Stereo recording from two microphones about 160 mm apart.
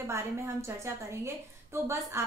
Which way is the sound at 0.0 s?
15° right (ahead or behind).